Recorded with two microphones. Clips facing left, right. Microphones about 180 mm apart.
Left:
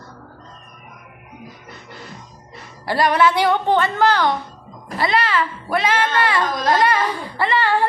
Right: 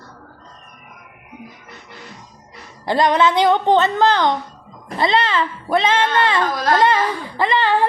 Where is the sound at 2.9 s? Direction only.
20° right (ahead or behind).